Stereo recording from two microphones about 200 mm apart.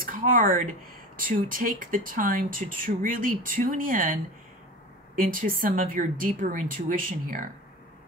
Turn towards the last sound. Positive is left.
turn(degrees=-45)  # may be behind; listen again after turning